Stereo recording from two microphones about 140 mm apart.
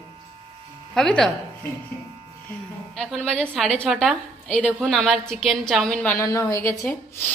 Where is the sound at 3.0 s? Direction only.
5° left (ahead or behind).